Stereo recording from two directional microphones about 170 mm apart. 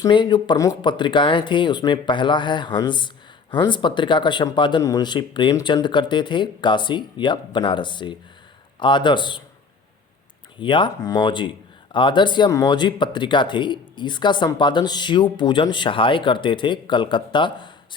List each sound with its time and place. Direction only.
0.0 s speech: 25° left (ahead or behind)
10.6 s speech: 30° left (ahead or behind)